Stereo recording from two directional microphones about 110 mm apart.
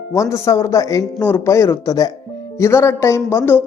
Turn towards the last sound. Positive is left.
turn(degrees=20)  # may be behind; listen again after turning